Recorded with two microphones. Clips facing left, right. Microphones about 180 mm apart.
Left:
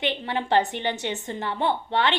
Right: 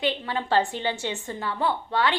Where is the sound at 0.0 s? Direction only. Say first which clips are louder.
Even; 20° left (ahead or behind).